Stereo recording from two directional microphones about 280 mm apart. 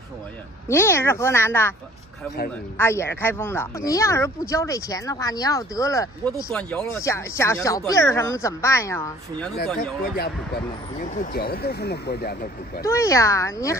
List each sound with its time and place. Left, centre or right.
0.7 s speech: centre
2.8 s speech: centre
10.0 s speech: left
12.8 s speech: centre